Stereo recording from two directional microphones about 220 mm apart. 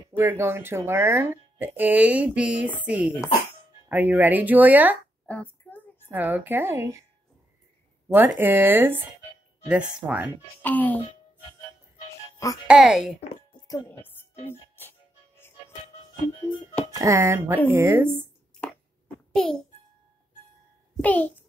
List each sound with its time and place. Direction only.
0.2 s a child's voice: 10° right (ahead or behind)
5.2 s hands: 5° left (ahead or behind)
6.0 s speech: 10° right (ahead or behind)
8.1 s speech: 10° right (ahead or behind)
10.6 s speech: 10° left (ahead or behind)
12.6 s a child's voice: 5° right (ahead or behind)
13.2 s a sound: 25° left (ahead or behind)
13.7 s music: 10° left (ahead or behind)
17.0 s speech: 10° right (ahead or behind)
19.3 s a child's voice: centre (ahead or behind)
20.9 s a child's voice: 5° left (ahead or behind)